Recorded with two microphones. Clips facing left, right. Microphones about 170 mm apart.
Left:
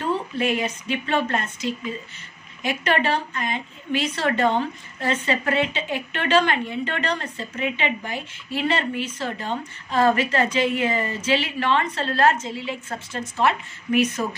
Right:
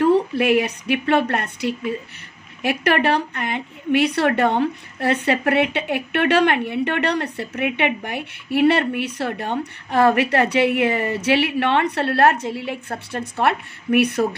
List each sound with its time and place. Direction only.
0.0 s a woman's voice: 65° right (ahead or behind)